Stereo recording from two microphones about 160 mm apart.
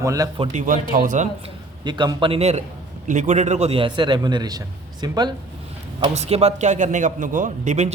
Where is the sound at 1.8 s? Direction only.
30° right (ahead or behind).